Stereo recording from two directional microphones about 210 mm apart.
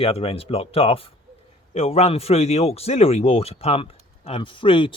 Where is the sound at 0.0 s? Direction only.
30° left (ahead or behind).